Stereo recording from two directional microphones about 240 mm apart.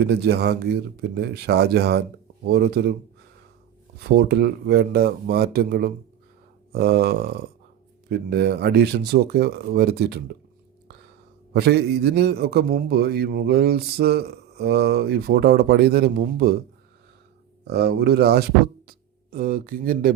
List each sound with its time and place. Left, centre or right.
0.0 s a man's voice: right
4.2 s a man's voice: right
11.5 s a man's voice: right
17.7 s speech: right